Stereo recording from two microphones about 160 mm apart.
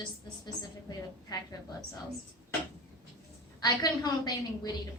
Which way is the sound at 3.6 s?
25° left (ahead or behind).